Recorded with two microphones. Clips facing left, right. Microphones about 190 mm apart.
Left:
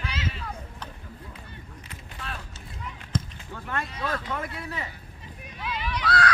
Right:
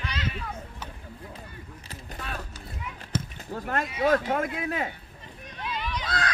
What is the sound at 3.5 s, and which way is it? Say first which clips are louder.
Speech: right 4 dB; 40° right (ahead or behind).